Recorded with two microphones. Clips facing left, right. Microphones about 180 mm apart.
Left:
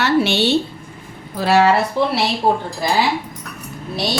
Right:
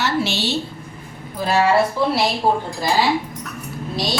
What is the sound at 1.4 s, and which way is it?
Speech, 75° left (ahead or behind).